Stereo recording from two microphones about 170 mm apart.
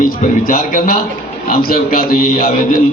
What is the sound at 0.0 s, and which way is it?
A man's voice, 50° left (ahead or behind).